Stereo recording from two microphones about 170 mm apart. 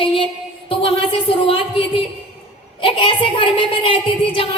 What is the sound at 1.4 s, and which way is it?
A woman's voice, 30° left (ahead or behind).